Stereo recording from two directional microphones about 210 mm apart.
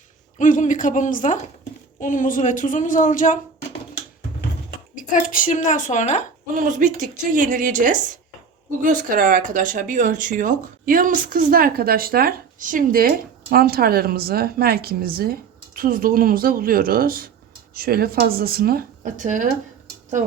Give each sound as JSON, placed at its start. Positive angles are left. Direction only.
{"t": 0.3, "sound": "speech", "side_deg": 35}
{"t": 4.9, "sound": "speech", "side_deg": 40}
{"t": 6.5, "sound": "a woman's voice", "side_deg": -40}